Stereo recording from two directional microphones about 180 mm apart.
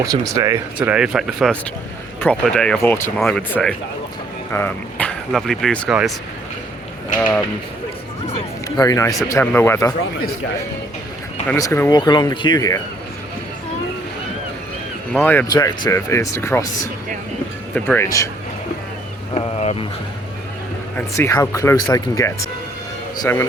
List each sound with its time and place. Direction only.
0.0 s speech: 20° right (ahead or behind); by 6.0 s 5° left (ahead or behind)
8.3 s speech: 20° left (ahead or behind)
11.5 s speech: 15° left (ahead or behind)
15.1 s speech: 10° left (ahead or behind)
15.4 s speech: 20° left (ahead or behind)
19.3 s a sound: 35° left (ahead or behind)
20.9 s speech: 15° left (ahead or behind)